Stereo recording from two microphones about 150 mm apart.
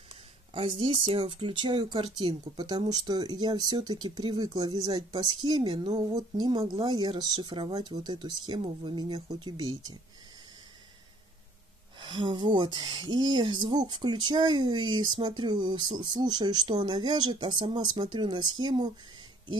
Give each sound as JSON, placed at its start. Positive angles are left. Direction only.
{"t": 0.6, "sound": "speech", "side_deg": -45}
{"t": 12.0, "sound": "speech", "side_deg": -30}